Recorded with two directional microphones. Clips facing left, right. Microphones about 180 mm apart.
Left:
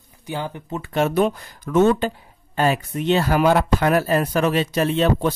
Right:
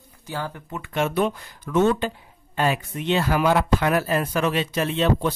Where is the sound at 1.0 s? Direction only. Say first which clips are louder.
Left 3 dB; 40° left (ahead or behind).